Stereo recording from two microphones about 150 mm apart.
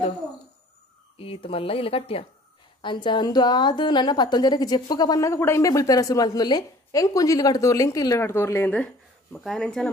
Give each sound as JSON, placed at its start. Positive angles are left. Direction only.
{"t": 1.1, "sound": "a woman's voice", "side_deg": 40}